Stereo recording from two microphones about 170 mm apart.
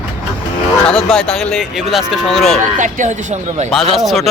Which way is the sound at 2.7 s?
45° right (ahead or behind).